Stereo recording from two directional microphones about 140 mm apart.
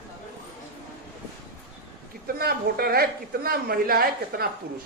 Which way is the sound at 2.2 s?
90° right.